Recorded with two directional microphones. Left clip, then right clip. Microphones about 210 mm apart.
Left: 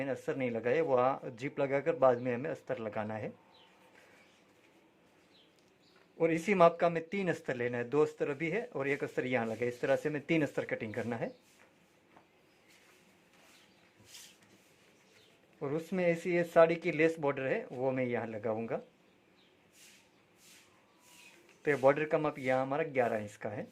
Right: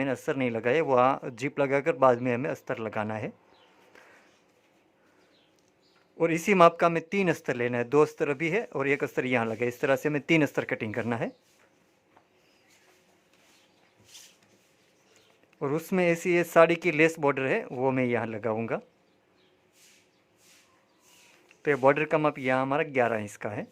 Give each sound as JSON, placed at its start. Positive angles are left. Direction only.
{"t": 0.0, "sound": "speech", "side_deg": -35}
{"t": 6.1, "sound": "speech", "side_deg": -35}
{"t": 15.5, "sound": "speech", "side_deg": -35}
{"t": 21.6, "sound": "speech", "side_deg": -30}